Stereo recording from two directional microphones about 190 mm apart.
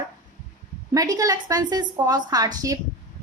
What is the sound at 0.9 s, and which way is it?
A woman's voice, 20° right (ahead or behind).